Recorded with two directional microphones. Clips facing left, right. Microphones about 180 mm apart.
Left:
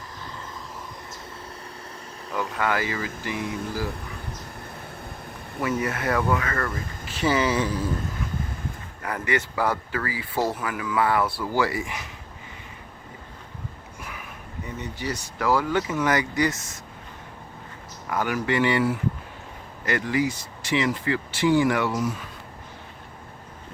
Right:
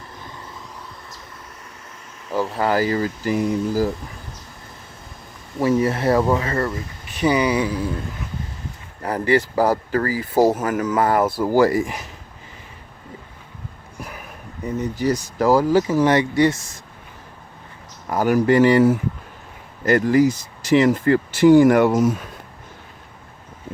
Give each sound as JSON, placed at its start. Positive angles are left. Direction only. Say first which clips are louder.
{"t": 2.3, "sound": "speech", "louder": "right 6 dB", "side_deg": -35}
{"t": 5.5, "sound": "speech", "louder": "right 8 dB", "side_deg": -35}
{"t": 9.0, "sound": "speech", "louder": "right 8 dB", "side_deg": -35}
{"t": 14.0, "sound": "speech", "louder": "right 5 dB", "side_deg": -40}
{"t": 18.1, "sound": "speech", "louder": "right 9 dB", "side_deg": -40}